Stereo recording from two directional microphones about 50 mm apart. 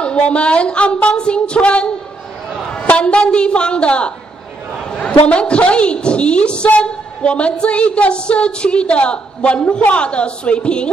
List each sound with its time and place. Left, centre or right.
0.0 s a woman's voice: left